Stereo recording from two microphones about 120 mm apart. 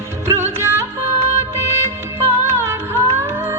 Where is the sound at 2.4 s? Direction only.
20° right (ahead or behind).